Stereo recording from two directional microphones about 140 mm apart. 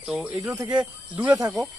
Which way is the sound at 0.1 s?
5° right (ahead or behind).